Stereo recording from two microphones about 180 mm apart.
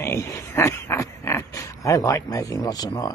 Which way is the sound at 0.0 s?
15° left (ahead or behind).